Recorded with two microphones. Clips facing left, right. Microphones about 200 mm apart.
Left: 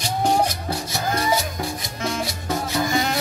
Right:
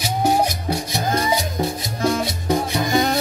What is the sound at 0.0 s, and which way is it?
Music, 10° right (ahead or behind).